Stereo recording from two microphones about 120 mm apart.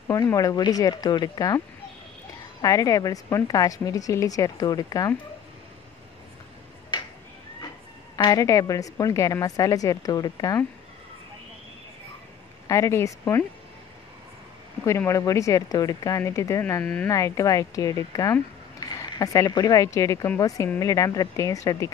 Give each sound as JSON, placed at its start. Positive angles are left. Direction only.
{"t": 0.1, "sound": "speech", "side_deg": 25}
{"t": 2.6, "sound": "a woman's voice", "side_deg": 30}
{"t": 8.2, "sound": "a woman's voice", "side_deg": 30}
{"t": 12.6, "sound": "a woman's voice", "side_deg": 25}
{"t": 14.9, "sound": "a woman's voice", "side_deg": 25}
{"t": 16.8, "sound": "speech", "side_deg": 5}
{"t": 17.1, "sound": "a woman's voice", "side_deg": 30}